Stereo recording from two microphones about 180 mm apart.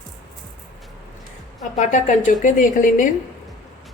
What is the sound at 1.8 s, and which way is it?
A woman's voice, 45° left (ahead or behind).